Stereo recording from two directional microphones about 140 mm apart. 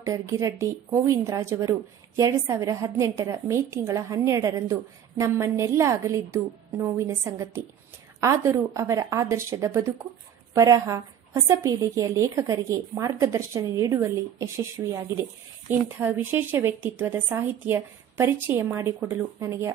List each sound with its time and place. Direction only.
0.0 s a woman's voice: 20° right (ahead or behind)